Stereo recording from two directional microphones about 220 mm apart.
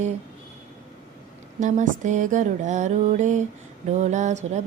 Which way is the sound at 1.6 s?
35° right (ahead or behind).